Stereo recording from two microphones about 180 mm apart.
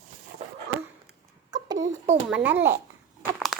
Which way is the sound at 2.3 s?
10° right (ahead or behind).